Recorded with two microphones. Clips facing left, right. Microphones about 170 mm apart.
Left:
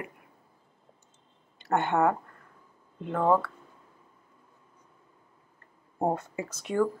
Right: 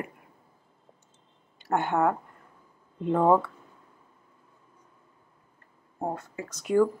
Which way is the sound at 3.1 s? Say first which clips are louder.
Right 3 dB; 20° right (ahead or behind).